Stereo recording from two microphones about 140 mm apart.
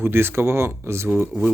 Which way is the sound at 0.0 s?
15° right (ahead or behind).